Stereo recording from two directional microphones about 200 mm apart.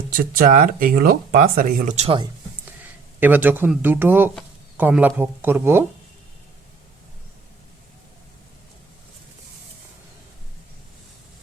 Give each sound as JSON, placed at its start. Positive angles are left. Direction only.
{"t": 0.2, "sound": "speech", "side_deg": -45}
{"t": 3.2, "sound": "speech", "side_deg": -10}